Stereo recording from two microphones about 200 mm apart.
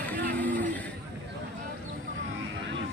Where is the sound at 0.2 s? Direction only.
45° right (ahead or behind).